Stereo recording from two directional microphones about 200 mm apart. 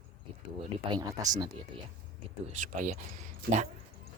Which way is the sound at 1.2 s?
15° right (ahead or behind).